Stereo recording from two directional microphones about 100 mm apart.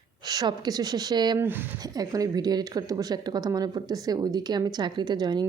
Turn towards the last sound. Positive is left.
turn(degrees=-45)  # may be behind; listen again after turning